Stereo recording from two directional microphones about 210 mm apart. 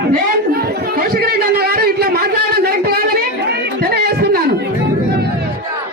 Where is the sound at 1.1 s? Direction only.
45° right (ahead or behind).